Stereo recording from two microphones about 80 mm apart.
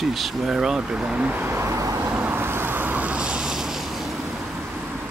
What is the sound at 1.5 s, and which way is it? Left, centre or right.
Vehicle, right.